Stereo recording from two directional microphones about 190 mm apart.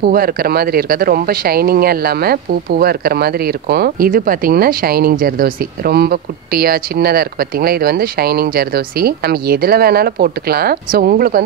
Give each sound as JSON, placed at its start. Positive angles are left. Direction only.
{"t": 0.0, "sound": "speech", "side_deg": -50}